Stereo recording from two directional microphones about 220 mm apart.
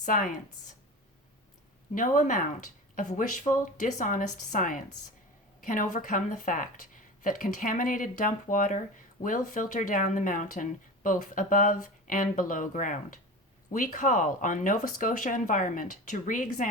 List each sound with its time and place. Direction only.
0.0 s speech: 40° left (ahead or behind)
2.0 s speech: 35° left (ahead or behind)